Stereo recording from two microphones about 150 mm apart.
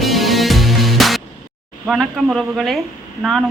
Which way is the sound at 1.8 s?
Centre (ahead or behind).